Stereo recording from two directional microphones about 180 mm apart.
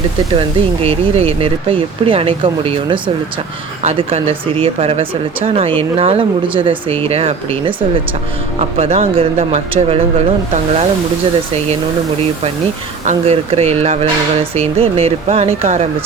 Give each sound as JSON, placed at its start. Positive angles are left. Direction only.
{"t": 0.3, "sound": "speech", "side_deg": -30}
{"t": 8.8, "sound": "speech", "side_deg": -35}
{"t": 13.1, "sound": "speech", "side_deg": -35}